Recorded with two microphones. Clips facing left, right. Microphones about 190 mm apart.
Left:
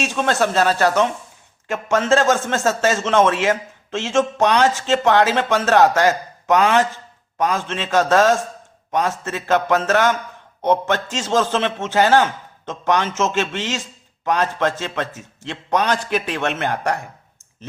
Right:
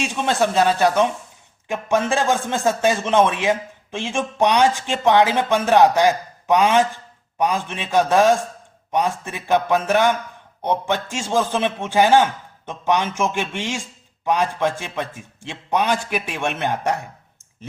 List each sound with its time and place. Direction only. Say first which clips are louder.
0.0 s a man's voice: left 1 dB; 15° right (ahead or behind)